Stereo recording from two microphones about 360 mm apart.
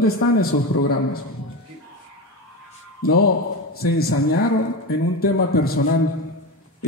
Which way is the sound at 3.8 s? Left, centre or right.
Left.